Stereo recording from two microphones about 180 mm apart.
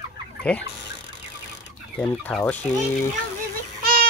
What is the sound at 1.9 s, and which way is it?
Speech, 5° left (ahead or behind).